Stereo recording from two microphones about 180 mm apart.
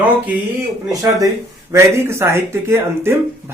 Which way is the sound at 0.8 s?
20° right (ahead or behind).